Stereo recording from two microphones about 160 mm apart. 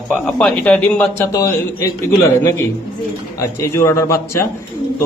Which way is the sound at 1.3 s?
20° left (ahead or behind).